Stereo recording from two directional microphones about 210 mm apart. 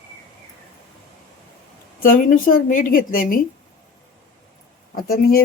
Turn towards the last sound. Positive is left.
turn(degrees=45)  # may be behind; listen again after turning